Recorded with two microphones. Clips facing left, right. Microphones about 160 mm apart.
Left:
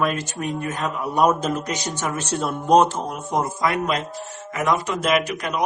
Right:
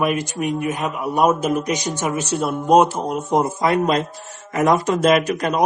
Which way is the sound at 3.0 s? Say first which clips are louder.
Right 5 dB; 20° right (ahead or behind).